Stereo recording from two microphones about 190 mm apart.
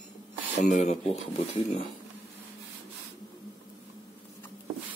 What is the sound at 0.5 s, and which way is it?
Speech, 40° left (ahead or behind).